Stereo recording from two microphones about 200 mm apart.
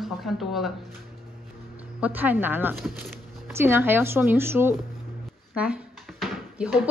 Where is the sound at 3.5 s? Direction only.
10° right (ahead or behind).